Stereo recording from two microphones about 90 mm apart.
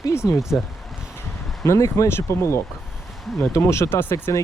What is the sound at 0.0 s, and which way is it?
Speech, 35° left (ahead or behind).